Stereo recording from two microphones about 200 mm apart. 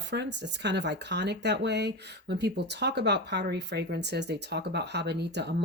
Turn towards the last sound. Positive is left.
turn(degrees=-55)  # may be behind; listen again after turning